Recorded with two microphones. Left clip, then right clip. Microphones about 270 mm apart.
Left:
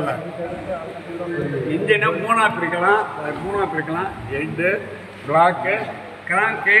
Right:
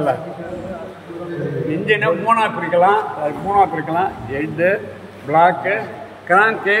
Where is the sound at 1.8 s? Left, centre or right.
Centre.